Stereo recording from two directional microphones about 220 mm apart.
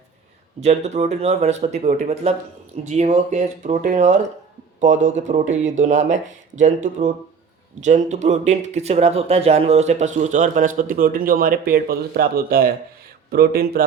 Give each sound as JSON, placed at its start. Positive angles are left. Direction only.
{"t": 0.6, "sound": "speech", "side_deg": -30}
{"t": 7.8, "sound": "speech", "side_deg": -35}